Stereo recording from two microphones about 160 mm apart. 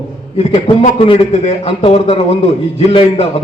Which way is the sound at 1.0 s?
35° left (ahead or behind).